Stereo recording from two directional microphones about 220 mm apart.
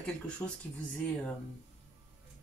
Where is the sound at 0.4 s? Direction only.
15° left (ahead or behind).